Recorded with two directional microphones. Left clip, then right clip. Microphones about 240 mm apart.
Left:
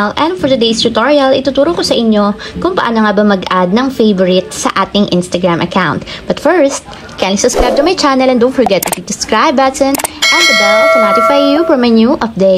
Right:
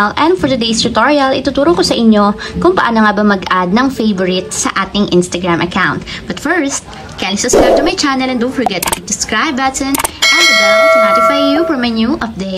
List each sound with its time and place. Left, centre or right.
0.0 s a woman's voice: centre
10.2 s speech: centre
11.2 s a woman's voice: centre